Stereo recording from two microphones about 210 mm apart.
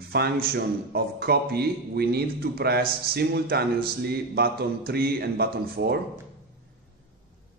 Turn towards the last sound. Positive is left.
turn(degrees=-50)  # may be behind; listen again after turning